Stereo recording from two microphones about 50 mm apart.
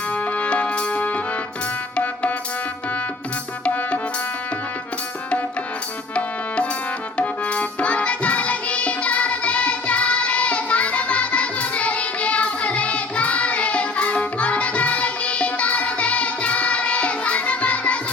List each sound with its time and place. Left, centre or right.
0.1 s music: left
3.6 s music: left
7.2 s music: left